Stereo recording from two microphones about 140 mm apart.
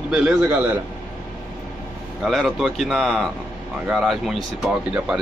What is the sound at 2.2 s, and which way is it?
A man's voice, centre (ahead or behind).